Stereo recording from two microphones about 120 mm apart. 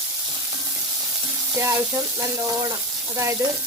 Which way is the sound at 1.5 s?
25° right (ahead or behind).